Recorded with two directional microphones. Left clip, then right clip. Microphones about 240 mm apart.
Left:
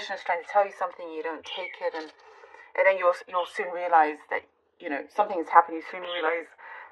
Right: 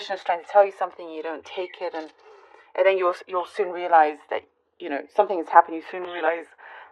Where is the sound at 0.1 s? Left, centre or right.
Right.